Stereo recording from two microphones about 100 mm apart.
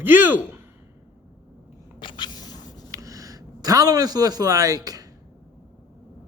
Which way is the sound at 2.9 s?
35° right (ahead or behind).